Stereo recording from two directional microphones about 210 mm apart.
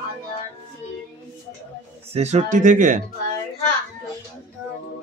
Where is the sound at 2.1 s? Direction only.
35° right (ahead or behind).